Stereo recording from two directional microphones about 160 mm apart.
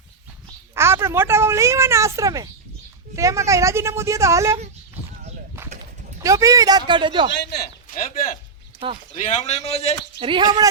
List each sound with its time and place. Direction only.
0.7 s a woman's voice: 15° right (ahead or behind)
6.2 s a woman's voice: 20° right (ahead or behind)
7.3 s speech: 85° left; by 8.3 s 60° left (ahead or behind)
9.2 s a man's voice: 45° left (ahead or behind)
10.2 s a woman's voice: 30° right (ahead or behind)